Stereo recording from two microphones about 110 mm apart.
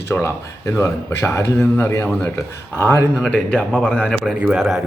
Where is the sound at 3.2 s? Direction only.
10° left (ahead or behind).